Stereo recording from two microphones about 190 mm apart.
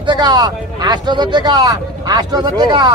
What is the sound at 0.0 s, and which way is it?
Speech, 25° right (ahead or behind).